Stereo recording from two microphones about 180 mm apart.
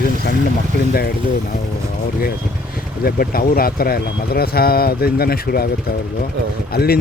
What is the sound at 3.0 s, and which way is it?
Speech, 55° left (ahead or behind).